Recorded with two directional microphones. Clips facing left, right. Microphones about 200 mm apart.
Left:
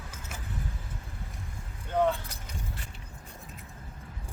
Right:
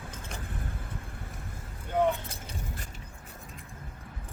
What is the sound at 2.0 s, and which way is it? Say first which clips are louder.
Keys jangling: even; 20° right (ahead or behind).